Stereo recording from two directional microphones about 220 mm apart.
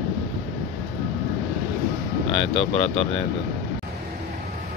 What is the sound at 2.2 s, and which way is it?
Speech, 30° left (ahead or behind).